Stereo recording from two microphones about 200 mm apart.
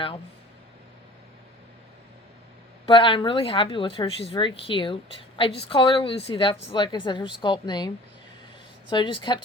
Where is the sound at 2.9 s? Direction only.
25° left (ahead or behind).